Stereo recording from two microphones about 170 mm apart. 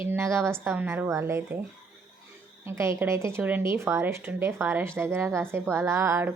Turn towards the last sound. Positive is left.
turn(degrees=-15)  # may be behind; listen again after turning